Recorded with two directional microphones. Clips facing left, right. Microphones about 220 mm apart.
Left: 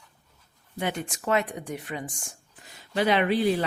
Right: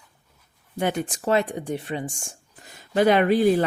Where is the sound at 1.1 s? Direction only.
30° right (ahead or behind).